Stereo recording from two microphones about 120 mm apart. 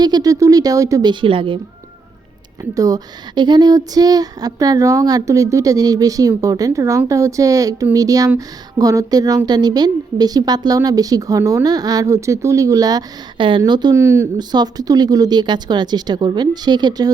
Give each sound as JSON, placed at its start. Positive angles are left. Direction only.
{"t": 0.0, "sound": "speech", "side_deg": -35}
{"t": 1.1, "sound": "a woman's voice", "side_deg": -45}
{"t": 2.7, "sound": "speech", "side_deg": -30}
{"t": 13.9, "sound": "speech", "side_deg": -25}
{"t": 14.3, "sound": "speech", "side_deg": -35}